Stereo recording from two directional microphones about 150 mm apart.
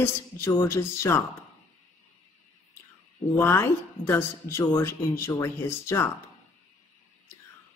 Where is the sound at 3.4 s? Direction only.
15° left (ahead or behind).